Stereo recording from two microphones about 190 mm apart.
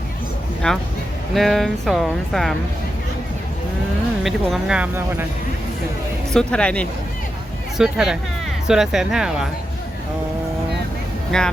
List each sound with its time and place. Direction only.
0.6 s speech: 5° left (ahead or behind)
4.2 s speech: centre (ahead or behind)
6.3 s speech: 5° left (ahead or behind)
11.3 s speech: 5° left (ahead or behind)